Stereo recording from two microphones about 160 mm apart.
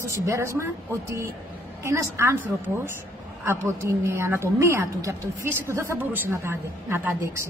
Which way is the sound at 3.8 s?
15° right (ahead or behind).